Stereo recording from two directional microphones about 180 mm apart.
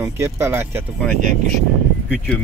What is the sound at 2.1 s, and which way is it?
Speech, 5° left (ahead or behind).